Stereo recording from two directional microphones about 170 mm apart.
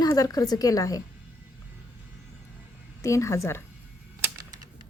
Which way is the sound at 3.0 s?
20° left (ahead or behind).